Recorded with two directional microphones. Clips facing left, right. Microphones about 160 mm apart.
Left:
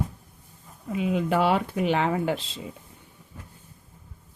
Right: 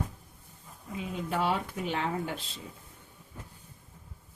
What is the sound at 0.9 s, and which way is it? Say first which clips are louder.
Speech: left 9 dB; 80° left.